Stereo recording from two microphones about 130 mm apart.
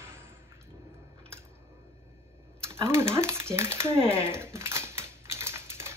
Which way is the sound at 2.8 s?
20° right (ahead or behind).